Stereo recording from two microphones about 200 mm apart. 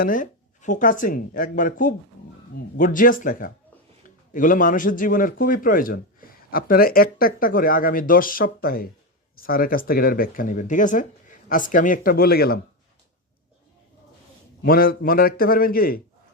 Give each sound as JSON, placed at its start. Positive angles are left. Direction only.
{"t": 0.0, "sound": "speech", "side_deg": 40}
{"t": 14.6, "sound": "speech", "side_deg": 45}